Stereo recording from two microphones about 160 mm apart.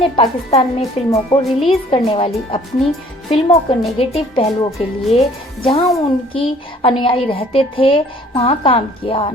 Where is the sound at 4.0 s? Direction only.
35° left (ahead or behind).